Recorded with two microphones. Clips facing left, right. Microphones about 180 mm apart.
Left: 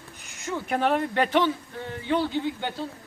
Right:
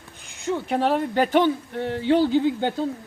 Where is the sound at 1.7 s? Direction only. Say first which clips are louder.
Right 6 dB; 75° right (ahead or behind).